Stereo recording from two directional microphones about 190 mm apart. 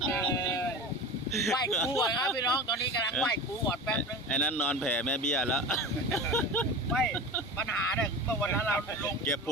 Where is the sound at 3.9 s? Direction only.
5° left (ahead or behind).